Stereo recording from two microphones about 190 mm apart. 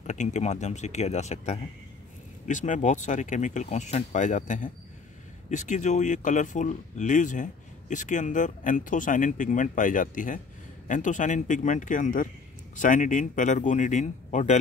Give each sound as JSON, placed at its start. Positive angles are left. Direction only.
{"t": 0.0, "sound": "speech", "side_deg": 40}